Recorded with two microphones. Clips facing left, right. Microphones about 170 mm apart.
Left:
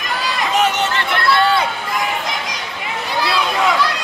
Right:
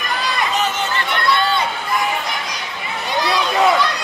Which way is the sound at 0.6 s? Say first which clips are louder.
Left 3 dB; 80° left.